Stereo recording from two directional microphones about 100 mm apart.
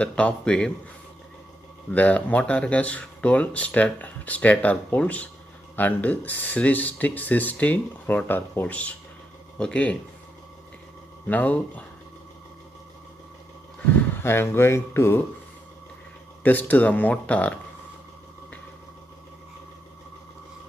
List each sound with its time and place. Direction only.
0.0 s speech: 10° left (ahead or behind)
2.0 s speech: 15° left (ahead or behind)
11.2 s speech: 15° left (ahead or behind)
14.1 s speech: 25° left (ahead or behind)
16.4 s speech: 15° left (ahead or behind)